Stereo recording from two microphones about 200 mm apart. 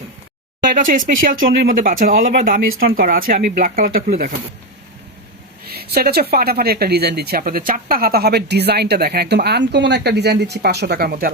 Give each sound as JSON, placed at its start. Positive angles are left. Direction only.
{"t": 0.7, "sound": "speech", "side_deg": -40}
{"t": 5.7, "sound": "speech", "side_deg": -50}